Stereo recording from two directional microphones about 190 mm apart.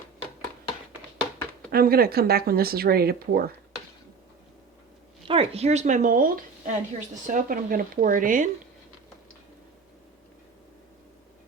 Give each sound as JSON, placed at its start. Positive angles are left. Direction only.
{"t": 1.7, "sound": "a woman's voice", "side_deg": -50}
{"t": 5.3, "sound": "a woman's voice", "side_deg": -30}